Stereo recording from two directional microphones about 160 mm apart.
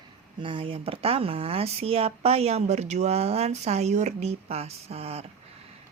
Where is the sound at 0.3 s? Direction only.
30° right (ahead or behind).